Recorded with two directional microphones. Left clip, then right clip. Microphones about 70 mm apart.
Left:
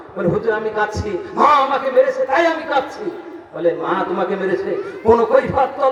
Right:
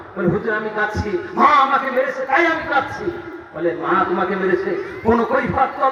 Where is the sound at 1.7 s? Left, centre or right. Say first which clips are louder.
Left 3 dB; left.